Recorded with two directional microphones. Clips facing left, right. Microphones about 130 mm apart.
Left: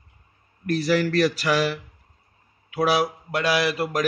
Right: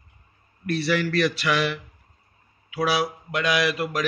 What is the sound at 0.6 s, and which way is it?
Speech, 40° left (ahead or behind).